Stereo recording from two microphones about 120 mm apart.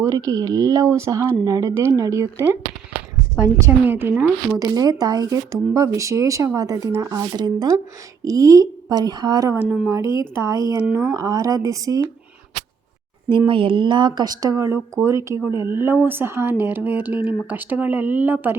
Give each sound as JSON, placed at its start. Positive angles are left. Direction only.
{"t": 0.0, "sound": "speech", "side_deg": -30}
{"t": 4.5, "sound": "speech", "side_deg": -30}
{"t": 9.6, "sound": "speech", "side_deg": -10}
{"t": 10.3, "sound": "speech", "side_deg": -25}
{"t": 13.5, "sound": "speech", "side_deg": -45}